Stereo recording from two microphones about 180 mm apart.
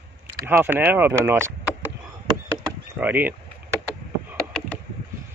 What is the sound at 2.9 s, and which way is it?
Speech, 10° right (ahead or behind).